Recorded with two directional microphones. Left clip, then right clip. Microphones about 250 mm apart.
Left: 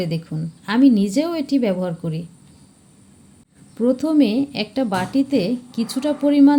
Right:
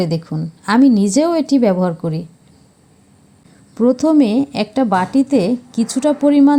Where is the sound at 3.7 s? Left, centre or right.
Centre.